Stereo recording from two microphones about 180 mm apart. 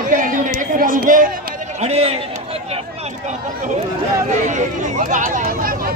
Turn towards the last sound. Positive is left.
turn(degrees=-50)  # may be behind; listen again after turning